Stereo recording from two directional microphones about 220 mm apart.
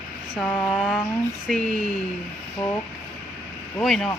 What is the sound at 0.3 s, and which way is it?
Speech, 5° left (ahead or behind).